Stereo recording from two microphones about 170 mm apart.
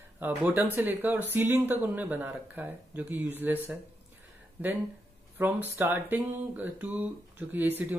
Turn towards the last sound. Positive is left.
turn(degrees=-10)  # may be behind; listen again after turning